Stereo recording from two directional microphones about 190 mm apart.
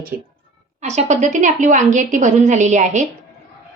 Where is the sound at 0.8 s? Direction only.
35° right (ahead or behind).